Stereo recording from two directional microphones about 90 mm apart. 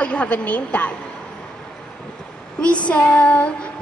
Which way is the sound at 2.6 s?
15° left (ahead or behind).